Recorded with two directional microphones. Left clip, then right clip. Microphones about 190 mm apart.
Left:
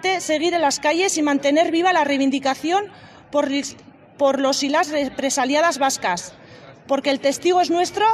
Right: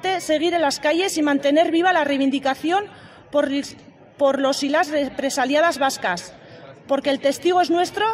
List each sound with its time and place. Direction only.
0.0 s a woman's voice: 15° left (ahead or behind)